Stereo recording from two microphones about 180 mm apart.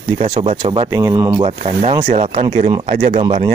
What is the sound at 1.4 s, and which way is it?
Speech, 30° right (ahead or behind).